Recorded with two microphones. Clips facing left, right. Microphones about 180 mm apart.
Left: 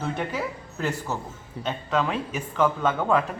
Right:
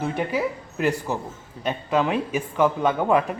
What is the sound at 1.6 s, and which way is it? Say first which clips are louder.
A man's voice: right 3 dB; 15° right (ahead or behind).